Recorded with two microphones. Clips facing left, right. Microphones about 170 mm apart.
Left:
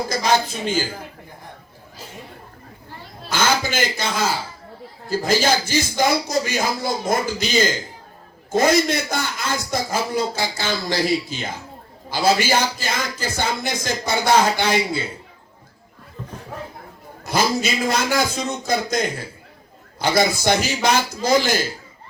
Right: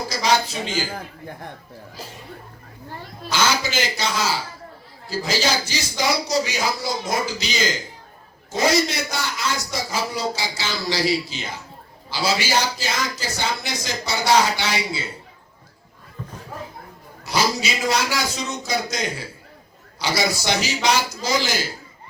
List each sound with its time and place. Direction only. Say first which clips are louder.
0.1 s speech: even; 50° left (ahead or behind)
3.3 s a man's voice: left 1 dB; 50° left (ahead or behind)
17.2 s a man's voice: left 2 dB; 50° left (ahead or behind)